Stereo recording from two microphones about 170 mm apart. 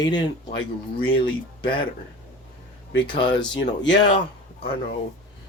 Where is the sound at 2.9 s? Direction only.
30° left (ahead or behind).